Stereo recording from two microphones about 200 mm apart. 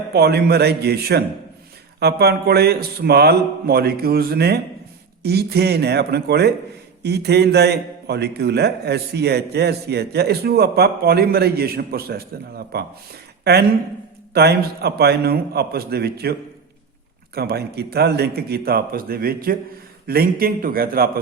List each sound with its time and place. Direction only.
0.1 s a man's voice: 55° right (ahead or behind)
17.3 s a man's voice: 55° right (ahead or behind)